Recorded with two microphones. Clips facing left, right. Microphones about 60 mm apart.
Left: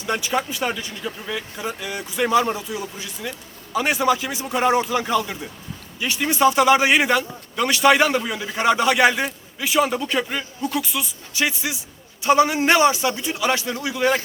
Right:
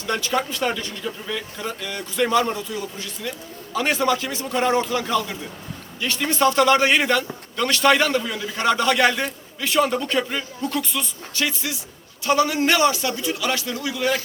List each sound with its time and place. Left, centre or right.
0.0 s a man's voice: centre
11.4 s a man's voice: centre